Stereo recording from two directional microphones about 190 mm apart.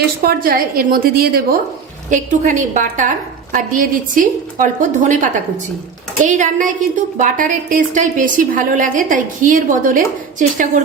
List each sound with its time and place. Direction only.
0.2 s a woman's voice: 50° right (ahead or behind)
2.0 s a woman's voice: 40° right (ahead or behind)